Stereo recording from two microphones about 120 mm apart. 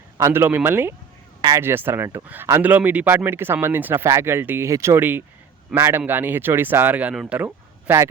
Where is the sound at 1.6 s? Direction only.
20° right (ahead or behind).